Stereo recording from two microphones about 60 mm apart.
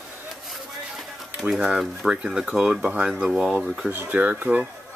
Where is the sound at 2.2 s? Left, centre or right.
Centre.